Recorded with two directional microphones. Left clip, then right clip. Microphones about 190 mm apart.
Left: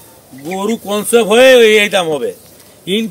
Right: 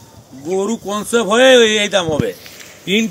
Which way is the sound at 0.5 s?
55° left (ahead or behind).